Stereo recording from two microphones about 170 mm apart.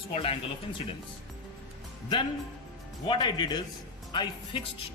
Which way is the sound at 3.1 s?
25° left (ahead or behind).